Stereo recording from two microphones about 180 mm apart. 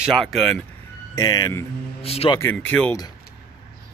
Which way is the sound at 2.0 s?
30° left (ahead or behind).